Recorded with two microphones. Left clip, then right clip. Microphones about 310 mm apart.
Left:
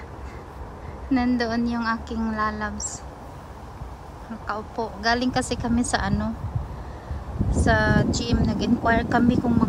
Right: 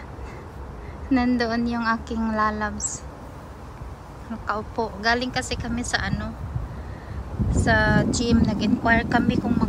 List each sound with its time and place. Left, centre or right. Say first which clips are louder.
1.1 s a woman's voice: right 1 dB; centre
4.5 s speech: right 2 dB; centre
7.5 s speech: right 1 dB; centre